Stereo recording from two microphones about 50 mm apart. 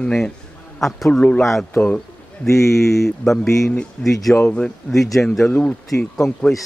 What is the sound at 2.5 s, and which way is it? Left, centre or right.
Speech, left.